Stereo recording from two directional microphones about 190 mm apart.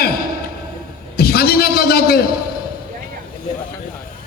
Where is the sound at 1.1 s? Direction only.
55° left (ahead or behind).